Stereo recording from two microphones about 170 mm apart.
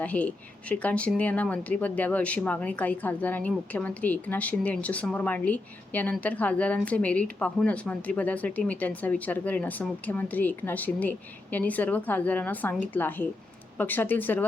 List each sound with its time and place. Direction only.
0.0 s speech: 10° left (ahead or behind)